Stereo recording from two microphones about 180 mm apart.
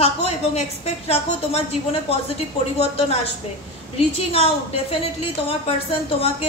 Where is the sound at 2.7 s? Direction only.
35° left (ahead or behind).